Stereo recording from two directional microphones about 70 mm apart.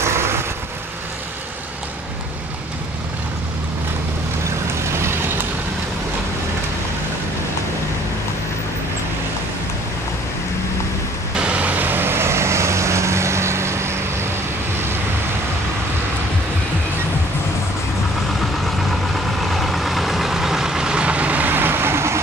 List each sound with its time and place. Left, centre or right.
0.0 s vehicle: right
11.3 s vehicle: centre; by 13.9 s right
19.4 s vehicle: centre; by 22.2 s right